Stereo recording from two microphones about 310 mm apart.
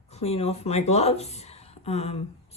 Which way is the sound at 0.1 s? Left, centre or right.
Centre.